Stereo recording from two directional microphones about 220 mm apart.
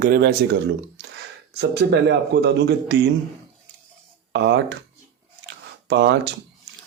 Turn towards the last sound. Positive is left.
turn(degrees=-50)  # may be behind; listen again after turning